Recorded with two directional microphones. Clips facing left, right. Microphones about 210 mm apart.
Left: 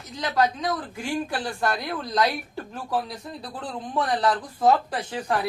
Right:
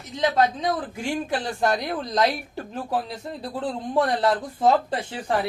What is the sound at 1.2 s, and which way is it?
Speech, 20° right (ahead or behind).